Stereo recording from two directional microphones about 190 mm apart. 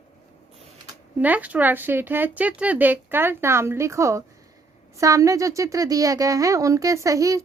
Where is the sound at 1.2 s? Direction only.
10° right (ahead or behind).